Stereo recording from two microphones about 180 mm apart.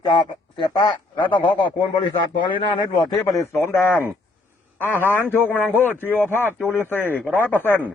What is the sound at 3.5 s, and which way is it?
A man's voice, 10° left (ahead or behind).